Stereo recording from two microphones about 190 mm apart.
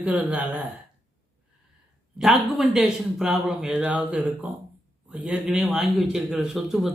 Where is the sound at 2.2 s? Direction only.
5° right (ahead or behind).